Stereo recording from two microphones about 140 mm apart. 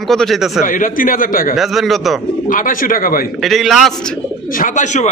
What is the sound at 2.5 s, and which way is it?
Speech, 75° left (ahead or behind).